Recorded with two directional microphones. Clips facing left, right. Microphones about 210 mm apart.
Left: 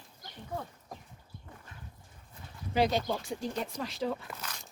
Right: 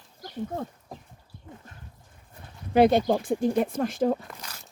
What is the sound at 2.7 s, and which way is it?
Speech, 55° right (ahead or behind).